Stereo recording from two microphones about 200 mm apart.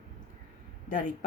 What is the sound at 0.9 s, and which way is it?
Speech, 40° left (ahead or behind).